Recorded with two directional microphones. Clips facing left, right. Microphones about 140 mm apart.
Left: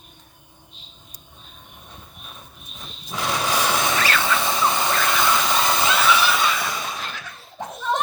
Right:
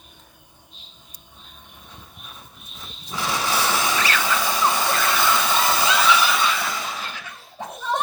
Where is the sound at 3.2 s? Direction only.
20° left (ahead or behind).